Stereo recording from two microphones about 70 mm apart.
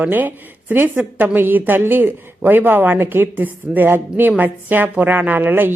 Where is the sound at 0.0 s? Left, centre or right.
Right.